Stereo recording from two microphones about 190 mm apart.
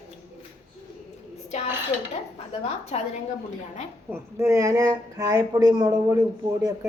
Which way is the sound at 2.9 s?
35° left (ahead or behind).